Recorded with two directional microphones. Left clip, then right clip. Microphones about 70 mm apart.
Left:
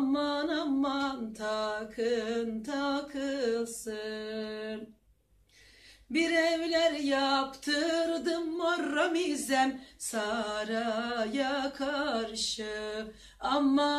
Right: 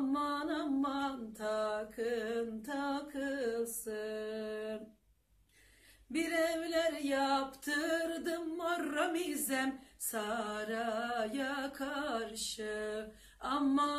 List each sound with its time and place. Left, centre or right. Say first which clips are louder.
0.1 s music: left 5 dB; right
6.1 s singing: left 6 dB; right
8.2 s music: left 6 dB; right